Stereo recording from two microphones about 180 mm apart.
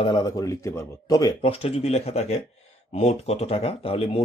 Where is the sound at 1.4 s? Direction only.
35° left (ahead or behind).